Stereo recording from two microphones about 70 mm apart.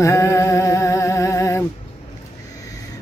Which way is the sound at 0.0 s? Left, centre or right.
Left.